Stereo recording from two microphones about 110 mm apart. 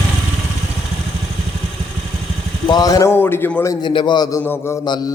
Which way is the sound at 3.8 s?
45° left (ahead or behind).